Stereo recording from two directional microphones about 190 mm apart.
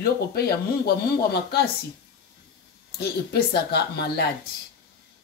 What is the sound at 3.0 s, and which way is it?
Speech, 60° left (ahead or behind).